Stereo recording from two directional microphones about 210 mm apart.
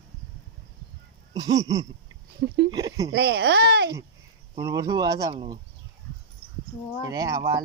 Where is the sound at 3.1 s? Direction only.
50° right (ahead or behind).